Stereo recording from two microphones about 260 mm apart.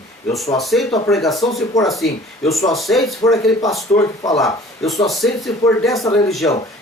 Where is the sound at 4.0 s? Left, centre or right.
Centre.